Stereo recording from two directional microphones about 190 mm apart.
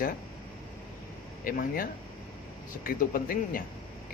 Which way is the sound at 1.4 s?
45° left (ahead or behind).